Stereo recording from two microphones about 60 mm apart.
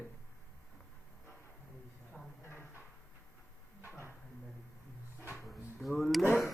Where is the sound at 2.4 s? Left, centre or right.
Left.